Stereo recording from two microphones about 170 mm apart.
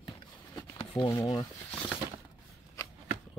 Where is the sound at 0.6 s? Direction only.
25° left (ahead or behind).